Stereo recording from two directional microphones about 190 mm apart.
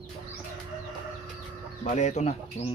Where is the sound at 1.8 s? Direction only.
40° left (ahead or behind).